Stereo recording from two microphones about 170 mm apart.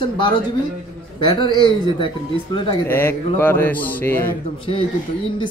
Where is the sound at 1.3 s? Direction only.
30° left (ahead or behind).